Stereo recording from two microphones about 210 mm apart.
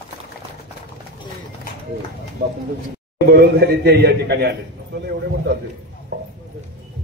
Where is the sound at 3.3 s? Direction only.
50° right (ahead or behind).